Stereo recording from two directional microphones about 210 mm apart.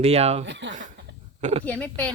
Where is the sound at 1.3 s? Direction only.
30° right (ahead or behind).